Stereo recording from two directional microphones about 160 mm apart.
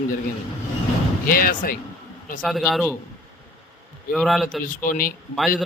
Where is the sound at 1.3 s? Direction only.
65° left (ahead or behind).